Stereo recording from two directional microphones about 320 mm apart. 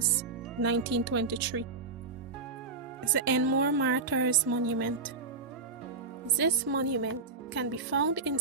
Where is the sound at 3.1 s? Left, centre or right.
Right.